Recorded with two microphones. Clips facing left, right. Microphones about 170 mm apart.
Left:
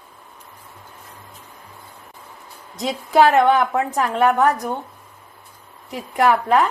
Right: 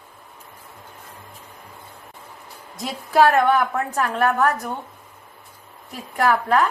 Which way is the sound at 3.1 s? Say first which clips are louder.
Left 2 dB; 20° left (ahead or behind).